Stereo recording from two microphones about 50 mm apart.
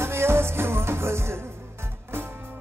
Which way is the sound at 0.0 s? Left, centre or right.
Right.